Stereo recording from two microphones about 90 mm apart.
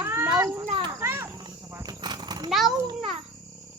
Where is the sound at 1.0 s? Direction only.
30° right (ahead or behind).